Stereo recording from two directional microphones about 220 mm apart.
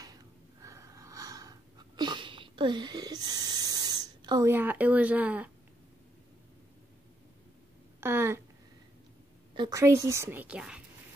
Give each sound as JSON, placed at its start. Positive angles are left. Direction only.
{"t": 0.0, "sound": "gasp", "side_deg": -15}
{"t": 2.0, "sound": "a sound", "side_deg": -20}
{"t": 8.0, "sound": "speech", "side_deg": -10}
{"t": 9.6, "sound": "a woman's voice", "side_deg": -15}